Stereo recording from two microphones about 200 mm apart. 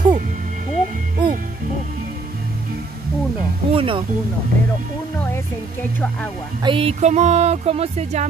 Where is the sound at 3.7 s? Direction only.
25° right (ahead or behind).